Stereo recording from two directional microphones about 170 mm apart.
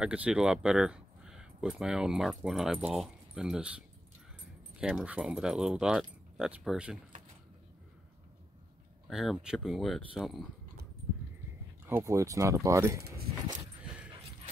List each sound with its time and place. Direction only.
0.0 s speech: 5° right (ahead or behind)
9.0 s speech: centre (ahead or behind)
11.8 s speech: 15° right (ahead or behind)